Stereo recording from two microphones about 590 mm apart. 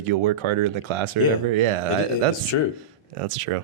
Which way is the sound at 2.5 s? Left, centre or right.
Left.